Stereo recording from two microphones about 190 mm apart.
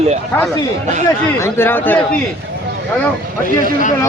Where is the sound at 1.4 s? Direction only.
10° left (ahead or behind).